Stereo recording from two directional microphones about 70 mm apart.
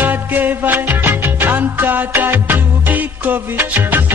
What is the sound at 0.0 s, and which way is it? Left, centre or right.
Music, right.